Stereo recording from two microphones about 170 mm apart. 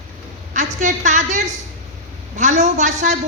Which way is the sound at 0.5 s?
45° right (ahead or behind).